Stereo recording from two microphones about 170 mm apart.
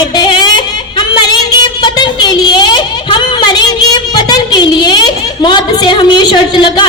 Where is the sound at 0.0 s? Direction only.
25° left (ahead or behind).